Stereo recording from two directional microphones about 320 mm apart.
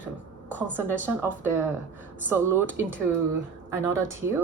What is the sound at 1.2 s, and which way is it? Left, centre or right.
A woman's voice, centre.